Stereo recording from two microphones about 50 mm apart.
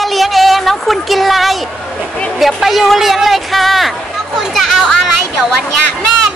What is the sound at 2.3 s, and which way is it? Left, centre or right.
Speech, centre.